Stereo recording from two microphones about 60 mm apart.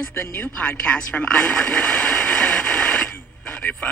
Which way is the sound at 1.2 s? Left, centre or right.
Centre.